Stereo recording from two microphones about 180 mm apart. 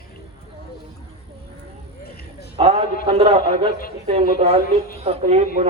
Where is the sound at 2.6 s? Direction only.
35° right (ahead or behind).